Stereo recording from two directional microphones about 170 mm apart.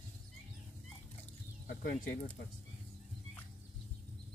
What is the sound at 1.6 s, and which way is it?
Speech, 55° left (ahead or behind).